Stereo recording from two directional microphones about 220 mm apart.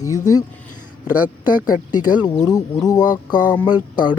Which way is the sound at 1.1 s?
10° right (ahead or behind).